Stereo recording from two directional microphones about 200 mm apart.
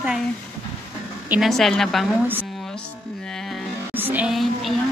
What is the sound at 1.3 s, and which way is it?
Speech, centre (ahead or behind).